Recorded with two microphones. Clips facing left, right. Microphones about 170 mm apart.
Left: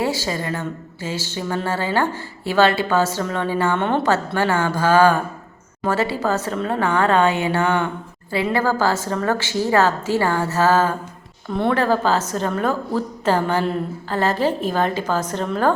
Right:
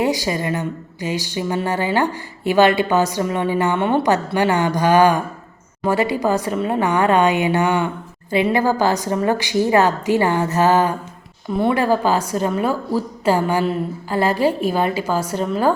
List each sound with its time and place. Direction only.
0.0 s a woman's voice: 15° right (ahead or behind)